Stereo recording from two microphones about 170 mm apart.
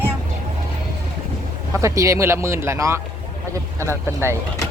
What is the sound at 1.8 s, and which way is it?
A man's voice, 20° right (ahead or behind).